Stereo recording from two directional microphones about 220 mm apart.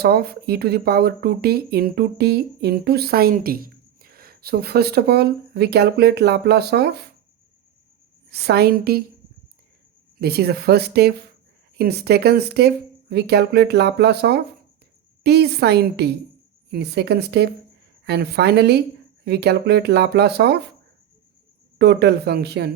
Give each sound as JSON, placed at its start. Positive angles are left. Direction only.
{"t": 0.0, "sound": "speech", "side_deg": -45}
{"t": 8.3, "sound": "speech", "side_deg": -45}
{"t": 10.2, "sound": "speech", "side_deg": -45}
{"t": 21.8, "sound": "speech", "side_deg": -50}